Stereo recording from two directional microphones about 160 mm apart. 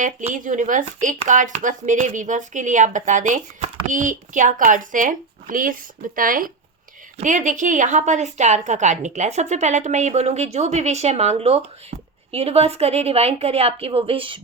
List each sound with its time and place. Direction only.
0.3 s a woman's voice: 55° right (ahead or behind); by 14.4 s 35° right (ahead or behind)